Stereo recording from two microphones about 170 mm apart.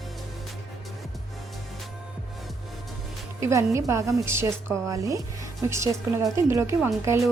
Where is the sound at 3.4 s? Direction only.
15° right (ahead or behind).